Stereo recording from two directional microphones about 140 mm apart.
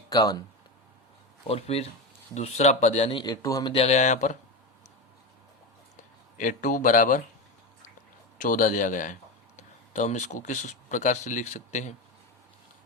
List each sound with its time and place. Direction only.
0.1 s speech: 25° left (ahead or behind)
1.5 s speech: 45° left (ahead or behind)
3.2 s speech: 25° left (ahead or behind)
3.7 s speech: 50° left (ahead or behind)
6.3 s speech: 70° left (ahead or behind)
8.4 s speech: 75° left (ahead or behind)
9.6 s speech: 60° left (ahead or behind)